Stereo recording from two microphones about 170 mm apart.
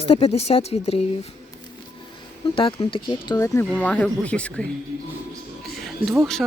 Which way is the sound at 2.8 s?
30° left (ahead or behind).